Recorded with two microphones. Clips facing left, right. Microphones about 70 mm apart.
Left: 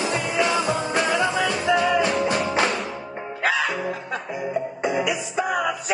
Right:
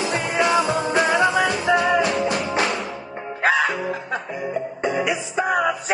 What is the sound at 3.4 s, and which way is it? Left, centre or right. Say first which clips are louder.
Music: right 4 dB; right.